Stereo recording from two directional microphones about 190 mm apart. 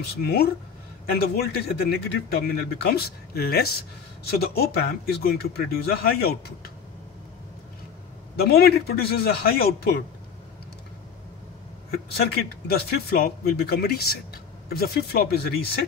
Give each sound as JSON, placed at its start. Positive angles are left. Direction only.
{"t": 0.2, "sound": "speech", "side_deg": 55}
{"t": 8.4, "sound": "speech", "side_deg": 55}
{"t": 12.3, "sound": "speech", "side_deg": 55}